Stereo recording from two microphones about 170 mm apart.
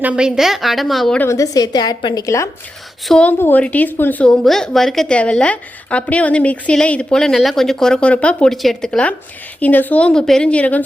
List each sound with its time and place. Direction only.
0.0 s a woman's voice: 5° right (ahead or behind)
1.3 s a woman's voice: 20° left (ahead or behind)
3.1 s a woman's voice: 5° left (ahead or behind)